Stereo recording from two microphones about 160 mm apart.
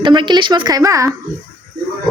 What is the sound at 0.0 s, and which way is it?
A woman's voice, 30° right (ahead or behind).